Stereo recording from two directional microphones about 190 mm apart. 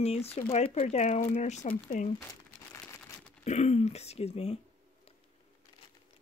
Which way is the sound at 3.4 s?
35° left (ahead or behind).